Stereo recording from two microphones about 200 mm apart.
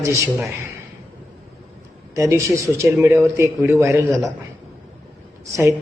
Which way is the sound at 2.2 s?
15° right (ahead or behind).